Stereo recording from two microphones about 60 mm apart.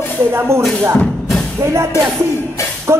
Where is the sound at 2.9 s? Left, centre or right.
Right.